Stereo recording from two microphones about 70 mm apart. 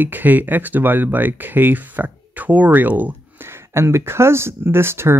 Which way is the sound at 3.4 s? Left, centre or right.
Right.